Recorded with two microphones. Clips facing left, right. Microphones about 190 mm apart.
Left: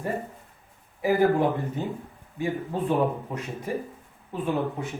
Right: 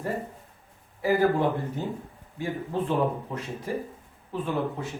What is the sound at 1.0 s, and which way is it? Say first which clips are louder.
Speech: left 1 dB; 20° left (ahead or behind).